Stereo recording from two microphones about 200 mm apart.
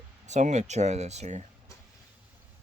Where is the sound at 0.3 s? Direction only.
35° right (ahead or behind).